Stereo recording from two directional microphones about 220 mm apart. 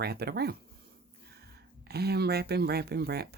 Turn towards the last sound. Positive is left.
turn(degrees=-45)  # may be behind; listen again after turning